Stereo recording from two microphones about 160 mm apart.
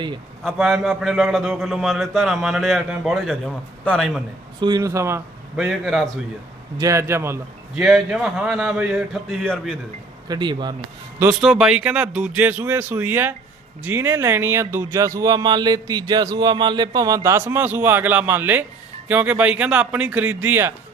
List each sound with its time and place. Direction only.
0.4 s a man's voice: centre (ahead or behind)
4.6 s speech: 20° right (ahead or behind)
5.5 s a man's voice: centre (ahead or behind)
6.7 s speech: 20° right (ahead or behind)
7.8 s a man's voice: centre (ahead or behind)
10.2 s speech: 25° right (ahead or behind)
11.3 s a man's voice: 5° right (ahead or behind)